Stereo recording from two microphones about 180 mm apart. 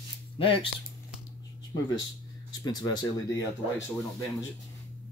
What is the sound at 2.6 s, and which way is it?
Speech, 20° left (ahead or behind).